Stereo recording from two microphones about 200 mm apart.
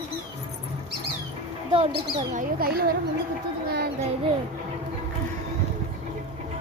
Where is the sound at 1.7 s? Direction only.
25° right (ahead or behind).